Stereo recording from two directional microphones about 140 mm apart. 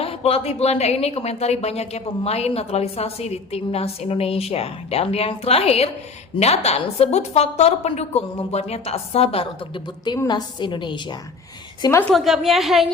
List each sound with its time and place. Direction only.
0.0 s a woman's voice: 45° left (ahead or behind)
12.1 s a woman's voice: centre (ahead or behind)